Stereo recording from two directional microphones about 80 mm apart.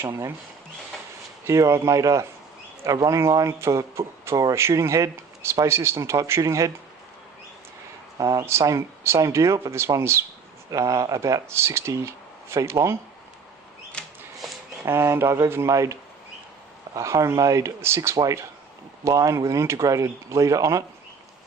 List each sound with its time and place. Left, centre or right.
0.0 s speech: right
1.5 s speech: right
8.2 s speech: right
10.7 s speech: right
14.0 s a sound: centre
14.8 s speech: right